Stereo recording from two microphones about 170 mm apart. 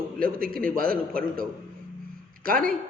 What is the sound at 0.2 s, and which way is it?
A man's voice, 60° right (ahead or behind).